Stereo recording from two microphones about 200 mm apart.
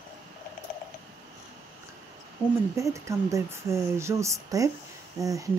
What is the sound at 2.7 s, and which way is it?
Speech, 15° right (ahead or behind).